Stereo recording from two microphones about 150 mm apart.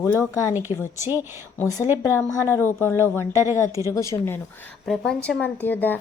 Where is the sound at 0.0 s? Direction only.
15° left (ahead or behind).